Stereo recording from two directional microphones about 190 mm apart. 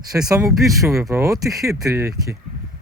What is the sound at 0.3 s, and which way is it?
Speech, 15° right (ahead or behind).